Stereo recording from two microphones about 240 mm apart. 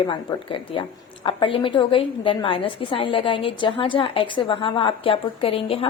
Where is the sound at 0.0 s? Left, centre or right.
Left.